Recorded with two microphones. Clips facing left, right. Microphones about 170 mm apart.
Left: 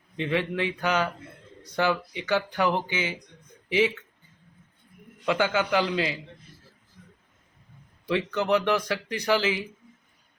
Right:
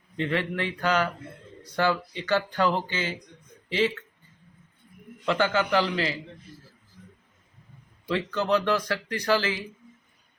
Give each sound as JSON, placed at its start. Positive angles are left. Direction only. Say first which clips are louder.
{"t": 0.2, "sound": "speech", "louder": "left 1 dB", "side_deg": 15}
{"t": 5.2, "sound": "speech", "louder": "even", "side_deg": 15}
{"t": 8.0, "sound": "speech", "louder": "left 1 dB", "side_deg": 15}